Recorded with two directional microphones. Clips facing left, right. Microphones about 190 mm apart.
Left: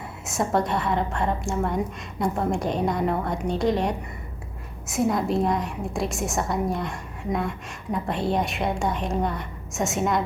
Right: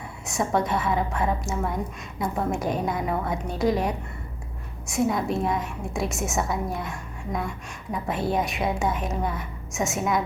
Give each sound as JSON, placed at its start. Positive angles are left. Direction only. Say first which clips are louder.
{"t": 0.3, "sound": "a woman's voice", "louder": "left 1 dB", "side_deg": 0}